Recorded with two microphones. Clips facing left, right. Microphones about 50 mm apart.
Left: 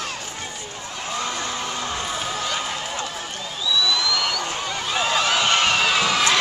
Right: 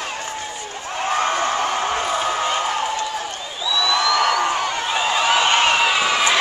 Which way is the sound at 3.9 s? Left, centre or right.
Right.